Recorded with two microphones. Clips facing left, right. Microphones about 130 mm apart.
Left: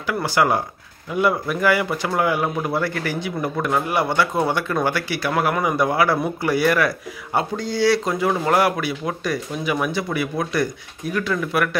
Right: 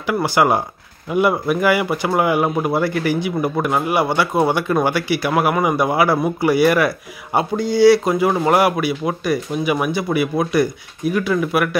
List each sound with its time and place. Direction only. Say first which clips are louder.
0.0 s a man's voice: right 3 dB; 15° right (ahead or behind)